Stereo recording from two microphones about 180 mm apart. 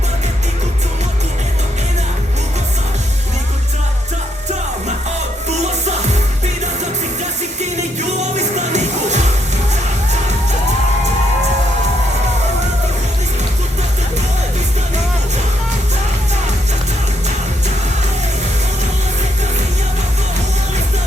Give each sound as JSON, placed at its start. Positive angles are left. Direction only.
{"t": 8.2, "sound": "music", "side_deg": -40}